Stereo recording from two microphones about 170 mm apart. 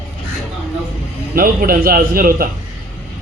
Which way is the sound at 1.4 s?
55° right (ahead or behind).